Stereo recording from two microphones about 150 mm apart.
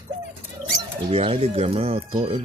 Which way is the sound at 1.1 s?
40° right (ahead or behind).